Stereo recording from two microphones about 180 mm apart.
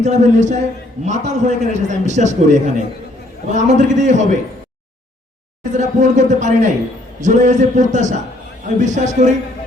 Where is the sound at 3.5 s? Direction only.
40° right (ahead or behind).